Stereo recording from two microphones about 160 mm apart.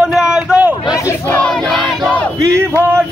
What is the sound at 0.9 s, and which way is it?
Battle cry, 20° left (ahead or behind).